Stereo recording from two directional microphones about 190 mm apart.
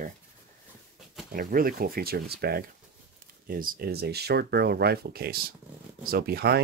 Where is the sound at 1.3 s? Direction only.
50° right (ahead or behind).